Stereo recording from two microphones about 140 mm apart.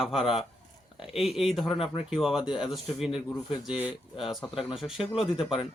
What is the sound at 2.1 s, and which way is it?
A man's voice, 5° right (ahead or behind).